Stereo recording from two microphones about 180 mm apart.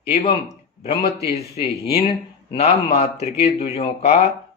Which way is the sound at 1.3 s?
35° left (ahead or behind).